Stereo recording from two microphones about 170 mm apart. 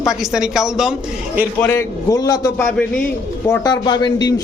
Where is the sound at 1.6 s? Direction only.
15° left (ahead or behind).